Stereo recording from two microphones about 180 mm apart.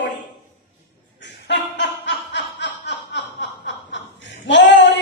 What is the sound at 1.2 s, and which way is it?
Chuckle, 75° left (ahead or behind).